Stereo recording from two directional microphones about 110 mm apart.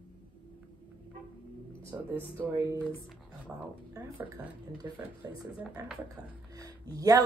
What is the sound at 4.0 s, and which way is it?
Speech, 35° right (ahead or behind).